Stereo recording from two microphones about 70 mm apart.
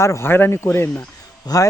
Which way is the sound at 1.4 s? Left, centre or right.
Left.